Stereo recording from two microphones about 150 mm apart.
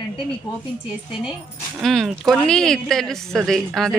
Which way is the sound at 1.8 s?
Centre (ahead or behind).